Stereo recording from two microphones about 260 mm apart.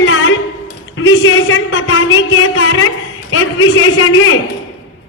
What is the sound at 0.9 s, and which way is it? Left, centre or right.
A woman's voice, left.